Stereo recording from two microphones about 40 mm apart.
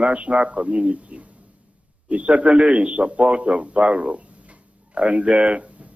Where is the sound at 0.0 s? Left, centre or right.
Right.